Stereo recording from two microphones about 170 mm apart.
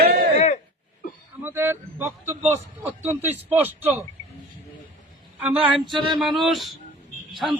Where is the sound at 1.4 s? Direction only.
15° right (ahead or behind).